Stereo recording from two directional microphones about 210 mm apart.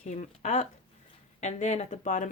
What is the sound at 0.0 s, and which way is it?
Speech, 35° left (ahead or behind).